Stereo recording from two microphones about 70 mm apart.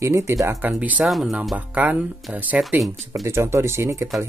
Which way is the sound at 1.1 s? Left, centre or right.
Centre.